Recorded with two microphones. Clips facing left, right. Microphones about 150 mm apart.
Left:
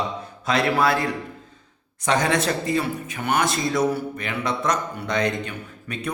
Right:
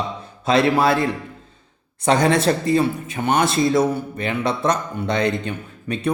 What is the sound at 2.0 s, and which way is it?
A man's voice, 30° right (ahead or behind).